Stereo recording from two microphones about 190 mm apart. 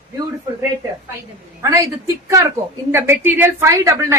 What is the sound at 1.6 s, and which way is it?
Speech, 15° right (ahead or behind).